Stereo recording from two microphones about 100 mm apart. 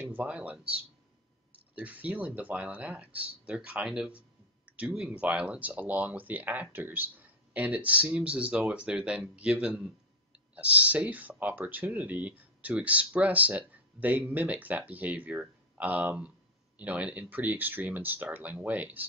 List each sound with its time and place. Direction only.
0.0 s speech: 15° right (ahead or behind)
1.8 s speech: 15° right (ahead or behind)